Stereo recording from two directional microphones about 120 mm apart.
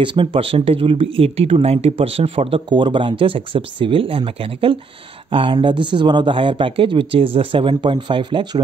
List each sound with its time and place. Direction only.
0.0 s speech: 45° right (ahead or behind)